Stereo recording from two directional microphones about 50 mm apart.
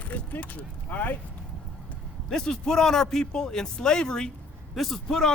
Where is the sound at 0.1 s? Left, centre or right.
Left.